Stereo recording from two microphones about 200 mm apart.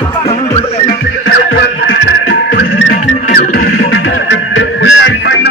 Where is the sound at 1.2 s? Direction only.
60° left (ahead or behind).